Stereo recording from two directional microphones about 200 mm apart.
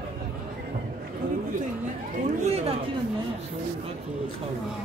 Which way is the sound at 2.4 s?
30° right (ahead or behind).